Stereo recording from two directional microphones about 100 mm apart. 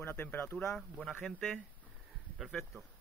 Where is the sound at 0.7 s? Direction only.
5° left (ahead or behind).